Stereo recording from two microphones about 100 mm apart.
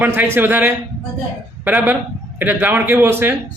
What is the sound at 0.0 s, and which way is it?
A man's voice, 20° right (ahead or behind).